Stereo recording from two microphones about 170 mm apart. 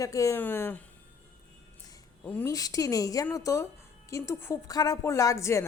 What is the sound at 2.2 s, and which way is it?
Speech, 10° left (ahead or behind).